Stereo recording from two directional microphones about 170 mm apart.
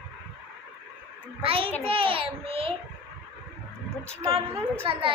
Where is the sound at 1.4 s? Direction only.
30° right (ahead or behind).